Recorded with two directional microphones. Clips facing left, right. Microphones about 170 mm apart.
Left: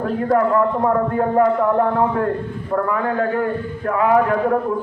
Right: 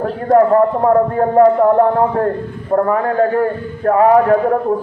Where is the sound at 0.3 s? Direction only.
40° right (ahead or behind).